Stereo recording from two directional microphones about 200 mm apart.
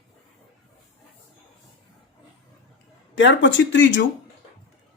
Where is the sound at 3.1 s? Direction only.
65° left (ahead or behind).